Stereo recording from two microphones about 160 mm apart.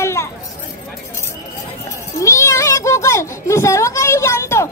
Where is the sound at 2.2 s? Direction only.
20° left (ahead or behind).